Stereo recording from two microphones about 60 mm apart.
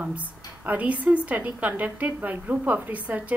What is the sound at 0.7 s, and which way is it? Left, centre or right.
A woman's voice, right.